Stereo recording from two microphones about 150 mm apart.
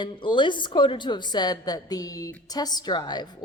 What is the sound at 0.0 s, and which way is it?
A woman's voice, 30° left (ahead or behind).